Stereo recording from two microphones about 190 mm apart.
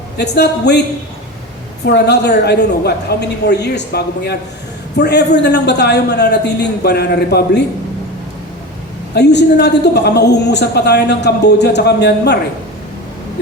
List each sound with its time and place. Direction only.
0.2 s a woman's voice: 60° left (ahead or behind)
1.8 s a woman's voice: 60° left (ahead or behind)
9.1 s a woman's voice: 60° left (ahead or behind)